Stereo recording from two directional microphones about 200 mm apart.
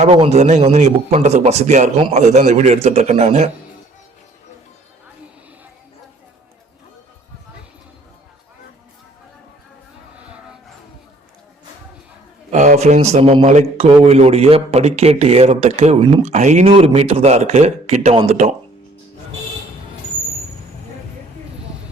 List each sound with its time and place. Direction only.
0.0 s a man's voice: 30° right (ahead or behind)
12.5 s a man's voice: 35° right (ahead or behind)